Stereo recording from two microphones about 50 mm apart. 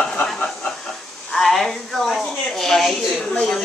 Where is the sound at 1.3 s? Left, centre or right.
Centre.